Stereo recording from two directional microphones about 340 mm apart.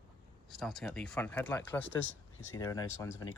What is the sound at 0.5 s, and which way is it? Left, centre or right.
Speech, centre.